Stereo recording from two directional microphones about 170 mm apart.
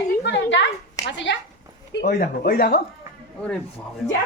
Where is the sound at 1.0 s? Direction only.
90° left.